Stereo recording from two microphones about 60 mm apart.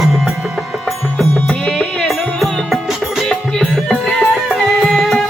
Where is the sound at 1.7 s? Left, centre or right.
Centre.